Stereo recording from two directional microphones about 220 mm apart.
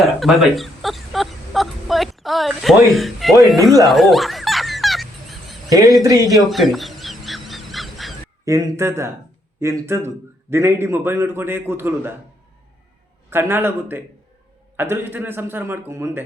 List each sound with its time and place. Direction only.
0.0 s speech: centre (ahead or behind)
3.8 s a sound: centre (ahead or behind)
5.6 s a man's voice: 15° right (ahead or behind)
6.5 s a sound: centre (ahead or behind)
8.4 s a man's voice: 15° right (ahead or behind)
13.3 s a man's voice: 10° right (ahead or behind)